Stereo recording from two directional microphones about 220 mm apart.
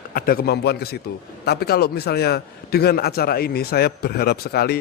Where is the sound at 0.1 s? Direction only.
45° left (ahead or behind).